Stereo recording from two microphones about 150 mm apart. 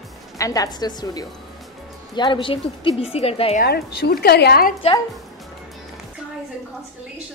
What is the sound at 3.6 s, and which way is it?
A woman's voice, 90° left.